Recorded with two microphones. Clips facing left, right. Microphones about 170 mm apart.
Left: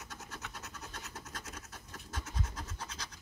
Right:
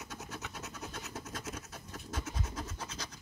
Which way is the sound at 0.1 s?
5° right (ahead or behind).